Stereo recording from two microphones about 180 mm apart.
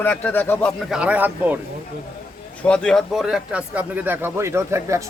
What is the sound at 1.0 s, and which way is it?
Speech, 10° right (ahead or behind).